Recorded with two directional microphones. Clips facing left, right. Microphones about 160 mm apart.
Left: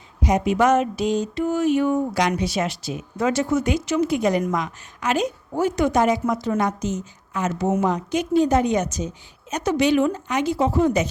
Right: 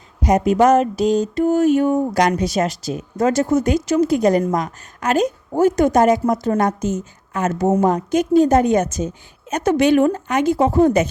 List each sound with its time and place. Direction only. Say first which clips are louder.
0.2 s a woman's voice: right 5 dB; 45° right (ahead or behind)